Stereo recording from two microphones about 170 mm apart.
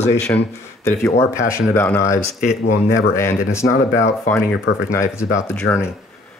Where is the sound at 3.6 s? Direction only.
50° left (ahead or behind).